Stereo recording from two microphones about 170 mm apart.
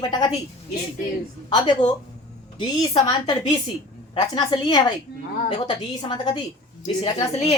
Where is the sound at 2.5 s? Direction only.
25° left (ahead or behind).